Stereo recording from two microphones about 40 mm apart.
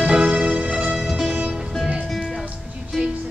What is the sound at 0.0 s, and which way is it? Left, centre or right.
Music, right.